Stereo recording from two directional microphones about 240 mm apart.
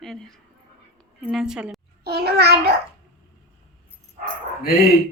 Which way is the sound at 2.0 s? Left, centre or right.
Right.